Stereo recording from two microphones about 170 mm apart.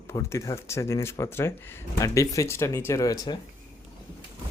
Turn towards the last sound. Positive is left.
turn(degrees=25)  # may be behind; listen again after turning